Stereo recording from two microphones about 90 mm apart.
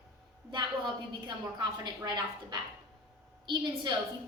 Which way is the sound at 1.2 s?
55° right (ahead or behind).